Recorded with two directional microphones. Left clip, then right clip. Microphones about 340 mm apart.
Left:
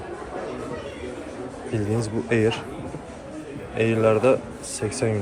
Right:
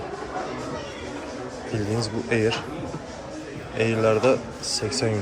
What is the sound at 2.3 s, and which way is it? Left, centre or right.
Speech, centre.